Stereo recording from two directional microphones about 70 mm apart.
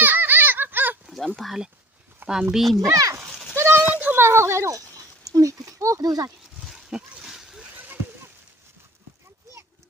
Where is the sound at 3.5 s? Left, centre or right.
Right.